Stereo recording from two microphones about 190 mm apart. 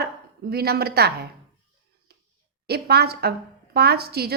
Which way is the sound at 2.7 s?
55° right (ahead or behind).